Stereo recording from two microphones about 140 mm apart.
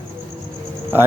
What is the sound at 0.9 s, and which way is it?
Speech, 15° right (ahead or behind).